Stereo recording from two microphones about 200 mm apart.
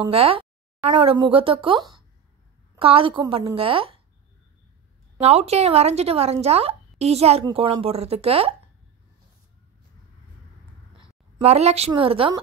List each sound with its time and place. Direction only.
0.0 s speech: 25° right (ahead or behind)
5.2 s speech: 30° right (ahead or behind)
11.0 s a woman's voice: 30° right (ahead or behind)